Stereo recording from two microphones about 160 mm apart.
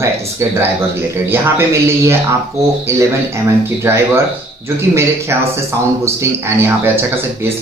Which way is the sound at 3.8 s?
15° right (ahead or behind).